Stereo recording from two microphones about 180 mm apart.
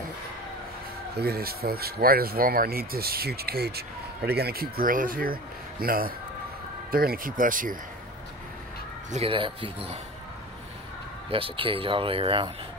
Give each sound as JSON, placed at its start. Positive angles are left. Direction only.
{"t": 1.1, "sound": "speech", "side_deg": -60}
{"t": 9.1, "sound": "speech", "side_deg": -30}
{"t": 11.2, "sound": "speech", "side_deg": -30}